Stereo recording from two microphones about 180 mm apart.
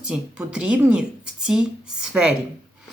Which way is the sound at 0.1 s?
5° right (ahead or behind).